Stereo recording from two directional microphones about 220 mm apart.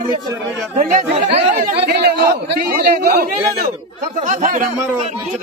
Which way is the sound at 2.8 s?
40° right (ahead or behind).